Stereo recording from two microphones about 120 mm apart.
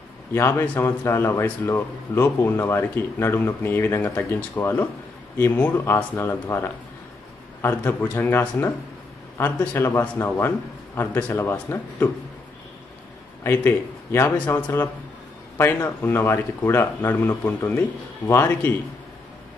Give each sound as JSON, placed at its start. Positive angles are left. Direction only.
{"t": 0.3, "sound": "a man's voice", "side_deg": 20}
{"t": 13.4, "sound": "a man's voice", "side_deg": 20}